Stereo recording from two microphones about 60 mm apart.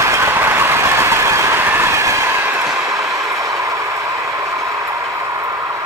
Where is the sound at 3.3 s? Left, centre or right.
Right.